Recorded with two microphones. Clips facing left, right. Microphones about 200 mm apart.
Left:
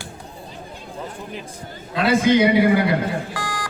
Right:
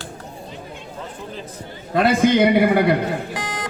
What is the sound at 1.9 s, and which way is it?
A man's voice, 55° right (ahead or behind).